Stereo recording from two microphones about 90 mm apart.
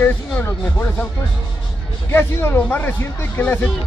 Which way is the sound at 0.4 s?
25° left (ahead or behind).